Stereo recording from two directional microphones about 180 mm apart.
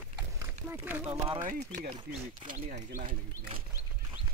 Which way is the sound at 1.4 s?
45° right (ahead or behind).